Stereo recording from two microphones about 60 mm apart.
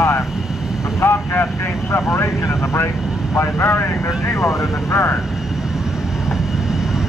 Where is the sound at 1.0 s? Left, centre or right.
Left.